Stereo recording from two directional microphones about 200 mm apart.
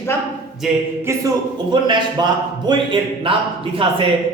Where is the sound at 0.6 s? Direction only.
Centre (ahead or behind).